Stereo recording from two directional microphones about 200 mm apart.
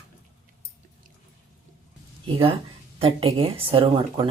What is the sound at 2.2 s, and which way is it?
Speech, 25° right (ahead or behind).